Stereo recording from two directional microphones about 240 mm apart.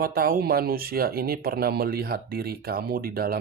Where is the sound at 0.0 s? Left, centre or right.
Right.